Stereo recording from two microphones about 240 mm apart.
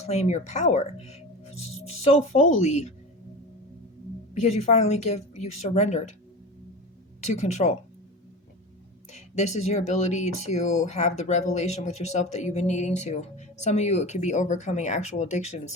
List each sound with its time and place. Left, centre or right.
0.0 s speech: left
4.4 s speech: left
7.2 s speech: left
9.1 s speech: left